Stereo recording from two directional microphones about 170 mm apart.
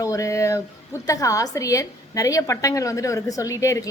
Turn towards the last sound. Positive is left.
turn(degrees=20)  # may be behind; listen again after turning